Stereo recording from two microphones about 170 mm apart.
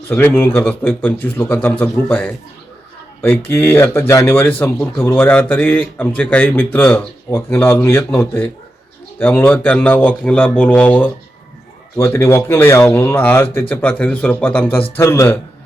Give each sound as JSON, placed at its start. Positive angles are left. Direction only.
{"t": 0.1, "sound": "speech", "side_deg": 15}